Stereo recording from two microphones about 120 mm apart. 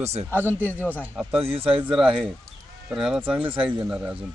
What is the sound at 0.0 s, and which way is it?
Speech, 60° right (ahead or behind).